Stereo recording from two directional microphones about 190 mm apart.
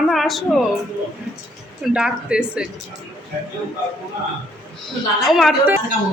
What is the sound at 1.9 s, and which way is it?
Speech, 5° right (ahead or behind).